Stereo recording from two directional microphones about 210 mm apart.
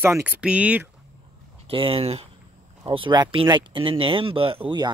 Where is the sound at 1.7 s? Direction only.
25° right (ahead or behind).